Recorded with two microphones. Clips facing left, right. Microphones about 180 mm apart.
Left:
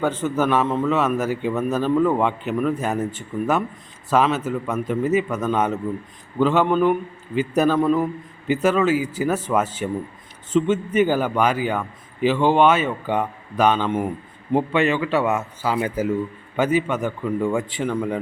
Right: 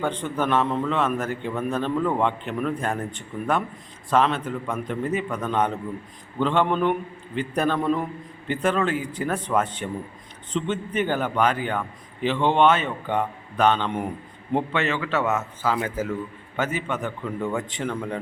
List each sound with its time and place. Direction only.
0.0 s a man's voice: 5° left (ahead or behind)